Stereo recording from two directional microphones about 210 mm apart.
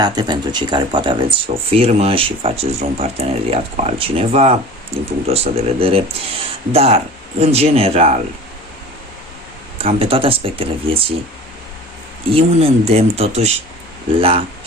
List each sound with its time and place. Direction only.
0.0 s speech: 20° right (ahead or behind)
9.7 s speech: 25° right (ahead or behind)
12.3 s speech: 25° right (ahead or behind)